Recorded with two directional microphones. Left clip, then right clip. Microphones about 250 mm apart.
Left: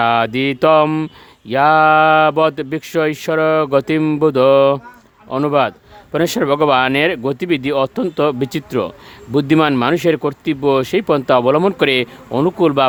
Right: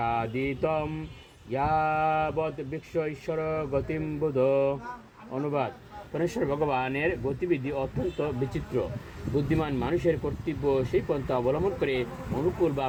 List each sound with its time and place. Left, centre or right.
0.0 s speech: left
9.5 s speech: left